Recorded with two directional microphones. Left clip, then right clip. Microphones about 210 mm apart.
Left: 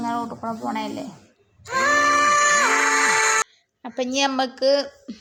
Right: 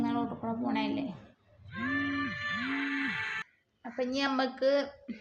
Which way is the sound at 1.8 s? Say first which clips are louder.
Left 16 dB; 50° left (ahead or behind).